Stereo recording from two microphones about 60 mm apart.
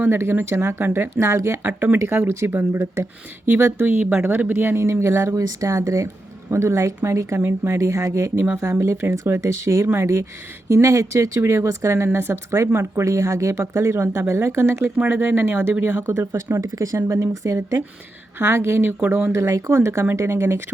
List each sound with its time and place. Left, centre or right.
0.0 s speech: right
1.6 s speech: right
14.9 s speech: right
16.5 s speech: right
18.3 s speech: right
19.4 s speech: right
19.7 s speech: right